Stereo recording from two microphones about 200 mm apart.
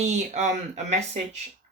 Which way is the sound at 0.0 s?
35° right (ahead or behind).